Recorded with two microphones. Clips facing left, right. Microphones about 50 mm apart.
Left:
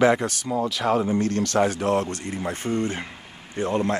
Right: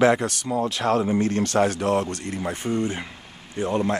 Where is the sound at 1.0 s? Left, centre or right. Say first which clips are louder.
Right 1 dB; centre.